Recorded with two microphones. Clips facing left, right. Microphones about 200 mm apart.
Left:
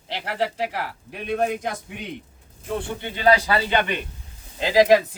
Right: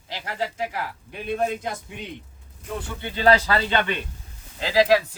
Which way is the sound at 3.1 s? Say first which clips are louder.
Even; 15° left (ahead or behind).